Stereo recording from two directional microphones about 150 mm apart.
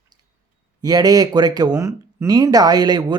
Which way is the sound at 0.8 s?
25° right (ahead or behind).